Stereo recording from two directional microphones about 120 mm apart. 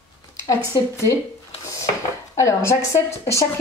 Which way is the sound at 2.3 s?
25° left (ahead or behind).